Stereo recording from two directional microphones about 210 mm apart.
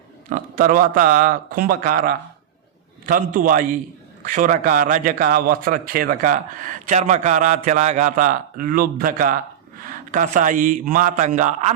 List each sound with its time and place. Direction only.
0.3 s a man's voice: 40° right (ahead or behind)